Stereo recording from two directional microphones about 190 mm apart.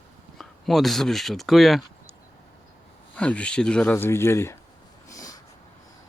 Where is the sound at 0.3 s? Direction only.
Centre (ahead or behind).